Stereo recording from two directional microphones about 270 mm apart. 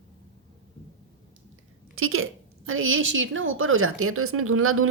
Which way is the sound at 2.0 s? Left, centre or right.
Right.